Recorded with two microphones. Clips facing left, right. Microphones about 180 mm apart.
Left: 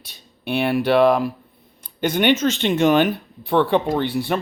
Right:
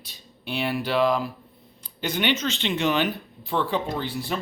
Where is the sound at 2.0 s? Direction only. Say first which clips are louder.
Left 8 dB; 50° left (ahead or behind).